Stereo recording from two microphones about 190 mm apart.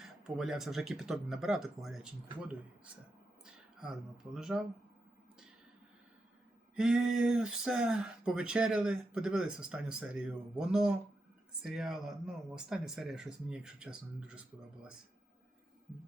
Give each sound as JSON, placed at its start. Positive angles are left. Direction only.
{"t": 0.0, "sound": "speech", "side_deg": -5}
{"t": 3.4, "sound": "a sound", "side_deg": -5}
{"t": 4.4, "sound": "speech", "side_deg": -5}
{"t": 6.7, "sound": "speech", "side_deg": -5}